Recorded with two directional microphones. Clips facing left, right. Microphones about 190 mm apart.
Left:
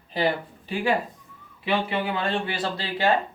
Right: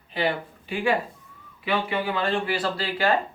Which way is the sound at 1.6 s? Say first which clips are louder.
Even; 25° left (ahead or behind).